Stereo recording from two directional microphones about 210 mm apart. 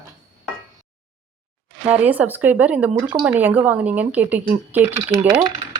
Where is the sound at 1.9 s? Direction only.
5° right (ahead or behind).